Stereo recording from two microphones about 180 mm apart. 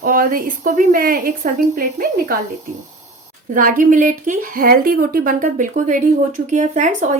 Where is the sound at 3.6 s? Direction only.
45° right (ahead or behind).